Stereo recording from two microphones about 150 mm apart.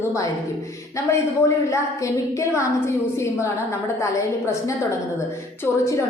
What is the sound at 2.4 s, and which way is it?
A woman's voice, 20° left (ahead or behind).